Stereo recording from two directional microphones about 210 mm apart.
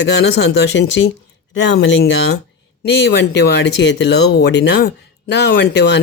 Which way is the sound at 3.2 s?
55° left (ahead or behind).